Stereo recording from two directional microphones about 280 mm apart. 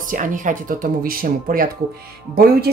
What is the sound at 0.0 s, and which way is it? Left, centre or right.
A woman's voice, right.